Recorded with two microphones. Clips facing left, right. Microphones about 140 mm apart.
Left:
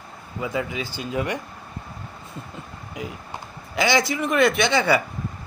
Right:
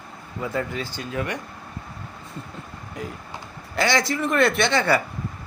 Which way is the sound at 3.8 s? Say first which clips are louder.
Left 1 dB; centre (ahead or behind).